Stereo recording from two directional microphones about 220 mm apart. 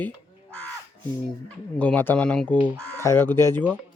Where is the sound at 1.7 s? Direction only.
5° left (ahead or behind).